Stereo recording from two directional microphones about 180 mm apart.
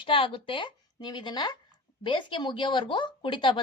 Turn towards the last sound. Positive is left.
turn(degrees=25)  # may be behind; listen again after turning